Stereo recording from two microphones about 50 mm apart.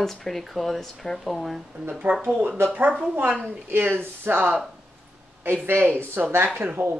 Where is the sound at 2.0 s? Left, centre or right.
Right.